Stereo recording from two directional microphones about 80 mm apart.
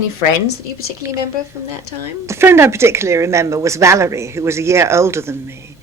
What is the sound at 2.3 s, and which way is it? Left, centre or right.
Speech, right.